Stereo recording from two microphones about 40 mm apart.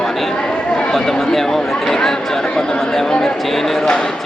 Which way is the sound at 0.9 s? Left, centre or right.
Centre.